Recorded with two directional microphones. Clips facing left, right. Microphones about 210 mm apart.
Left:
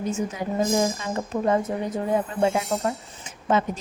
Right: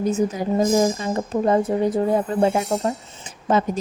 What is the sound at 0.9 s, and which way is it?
A woman's voice, 35° right (ahead or behind).